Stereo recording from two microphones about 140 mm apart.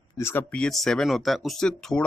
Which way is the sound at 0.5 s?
5° left (ahead or behind).